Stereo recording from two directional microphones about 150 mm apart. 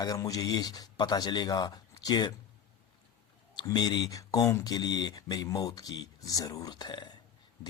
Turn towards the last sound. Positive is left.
turn(degrees=30)  # may be behind; listen again after turning